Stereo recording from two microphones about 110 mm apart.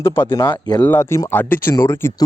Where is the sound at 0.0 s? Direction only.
20° left (ahead or behind).